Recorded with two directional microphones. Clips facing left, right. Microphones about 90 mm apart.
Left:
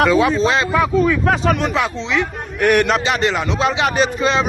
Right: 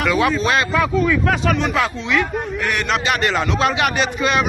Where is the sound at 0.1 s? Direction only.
25° left (ahead or behind).